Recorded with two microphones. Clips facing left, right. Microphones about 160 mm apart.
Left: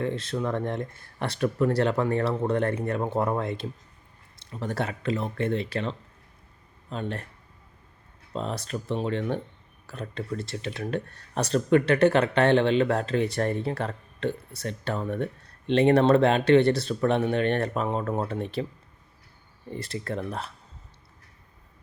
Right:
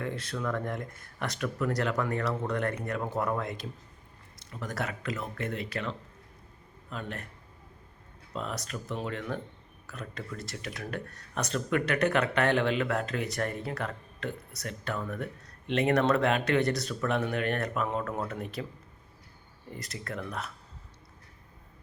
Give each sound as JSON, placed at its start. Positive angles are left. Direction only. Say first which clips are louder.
{"t": 0.0, "sound": "speech", "louder": "left 5 dB", "side_deg": 25}
{"t": 8.3, "sound": "speech", "louder": "left 5 dB", "side_deg": 30}
{"t": 19.7, "sound": "speech", "louder": "left 7 dB", "side_deg": 30}